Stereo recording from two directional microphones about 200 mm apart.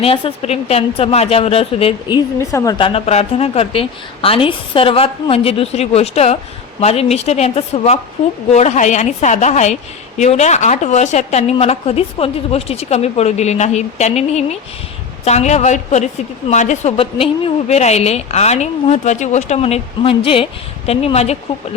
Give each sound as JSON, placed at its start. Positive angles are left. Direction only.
{"t": 0.0, "sound": "a woman's voice", "side_deg": 30}